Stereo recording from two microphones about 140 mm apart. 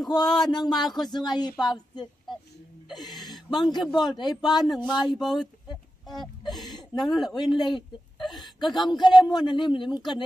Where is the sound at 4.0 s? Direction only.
30° left (ahead or behind).